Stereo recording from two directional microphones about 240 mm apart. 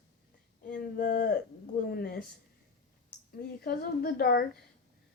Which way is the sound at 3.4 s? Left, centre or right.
Left.